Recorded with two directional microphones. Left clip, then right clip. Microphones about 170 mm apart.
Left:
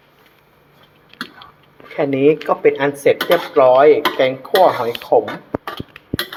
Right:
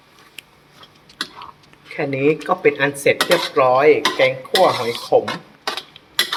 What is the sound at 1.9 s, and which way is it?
Speech, 5° left (ahead or behind).